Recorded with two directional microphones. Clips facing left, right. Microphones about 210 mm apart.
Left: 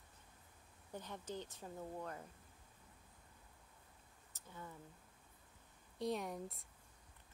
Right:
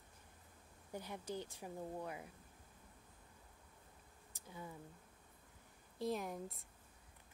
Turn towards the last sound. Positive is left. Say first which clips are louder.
# even
turn(degrees=0)  # may be behind; listen again after turning